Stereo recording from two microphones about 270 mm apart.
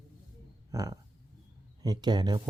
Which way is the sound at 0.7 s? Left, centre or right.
Centre.